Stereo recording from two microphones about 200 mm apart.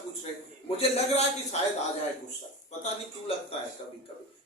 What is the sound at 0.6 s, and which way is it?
Speech, 30° left (ahead or behind).